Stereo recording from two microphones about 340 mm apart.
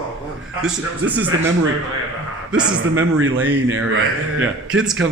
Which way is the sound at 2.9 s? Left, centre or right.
Right.